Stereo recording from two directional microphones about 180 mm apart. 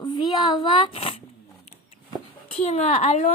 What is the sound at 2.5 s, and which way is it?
Speech, 40° left (ahead or behind).